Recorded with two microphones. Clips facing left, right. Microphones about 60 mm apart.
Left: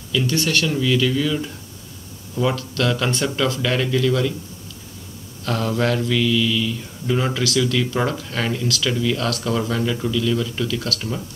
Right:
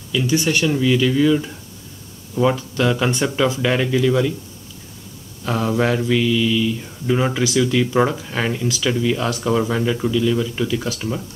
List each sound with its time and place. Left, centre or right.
0.1 s mantra: centre
5.4 s mantra: centre